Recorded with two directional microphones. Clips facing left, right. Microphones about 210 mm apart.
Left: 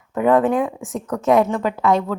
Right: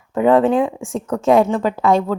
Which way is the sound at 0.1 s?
25° right (ahead or behind).